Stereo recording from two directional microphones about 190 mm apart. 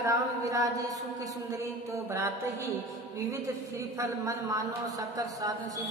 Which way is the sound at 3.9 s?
15° right (ahead or behind).